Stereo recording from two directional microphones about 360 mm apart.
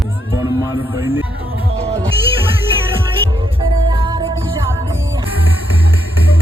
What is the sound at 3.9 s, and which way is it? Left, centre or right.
Music, centre.